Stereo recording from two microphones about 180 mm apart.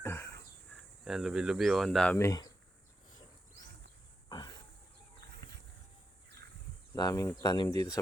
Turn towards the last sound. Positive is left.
turn(degrees=20)  # may be behind; listen again after turning